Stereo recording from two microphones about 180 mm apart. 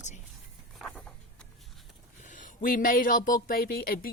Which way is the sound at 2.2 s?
45° left (ahead or behind).